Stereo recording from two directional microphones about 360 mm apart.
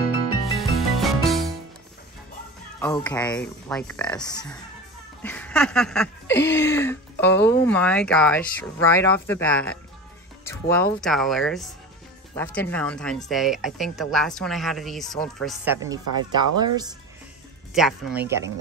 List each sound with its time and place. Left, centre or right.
0.5 s music: centre
2.8 s speech: centre
5.2 s a sound: centre
6.2 s speech: left
6.6 s speech: centre
17.7 s speech: centre